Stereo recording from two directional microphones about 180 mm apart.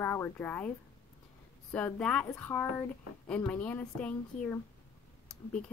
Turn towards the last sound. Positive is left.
turn(degrees=5)  # may be behind; listen again after turning